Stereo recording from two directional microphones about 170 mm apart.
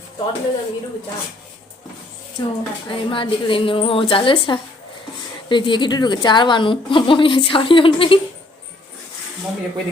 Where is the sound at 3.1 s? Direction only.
30° left (ahead or behind).